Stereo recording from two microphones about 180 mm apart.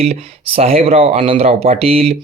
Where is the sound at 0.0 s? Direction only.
35° right (ahead or behind).